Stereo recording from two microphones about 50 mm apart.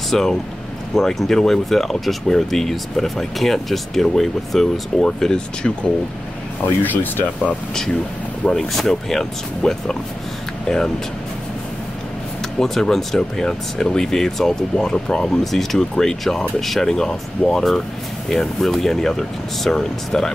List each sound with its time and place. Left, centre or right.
0.1 s speech: centre
6.8 s speech: left
8.5 s speech: centre
12.5 s speech: centre